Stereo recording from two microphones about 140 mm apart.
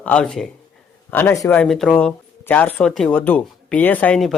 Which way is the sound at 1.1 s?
15° left (ahead or behind).